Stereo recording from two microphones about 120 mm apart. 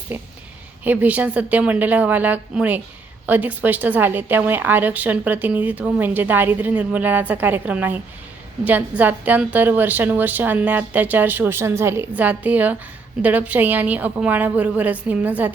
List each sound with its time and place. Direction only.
0.1 s a woman's voice: 15° right (ahead or behind)